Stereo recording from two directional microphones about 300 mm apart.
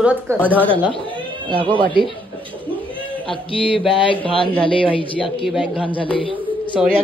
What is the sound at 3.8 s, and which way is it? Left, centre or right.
Speech, centre.